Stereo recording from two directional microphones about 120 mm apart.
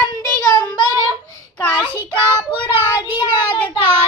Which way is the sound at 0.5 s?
35° left (ahead or behind).